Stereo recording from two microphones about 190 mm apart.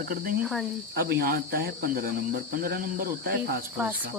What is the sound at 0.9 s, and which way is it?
Speech, 55° right (ahead or behind).